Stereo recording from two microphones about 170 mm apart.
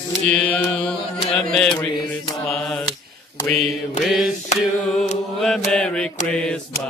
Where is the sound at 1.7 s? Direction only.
25° left (ahead or behind).